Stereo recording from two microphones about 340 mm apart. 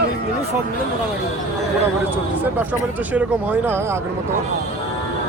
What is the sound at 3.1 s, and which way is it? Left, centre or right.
Speech, centre.